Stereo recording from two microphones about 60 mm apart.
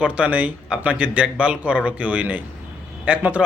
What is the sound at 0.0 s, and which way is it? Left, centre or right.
A man's voice, right.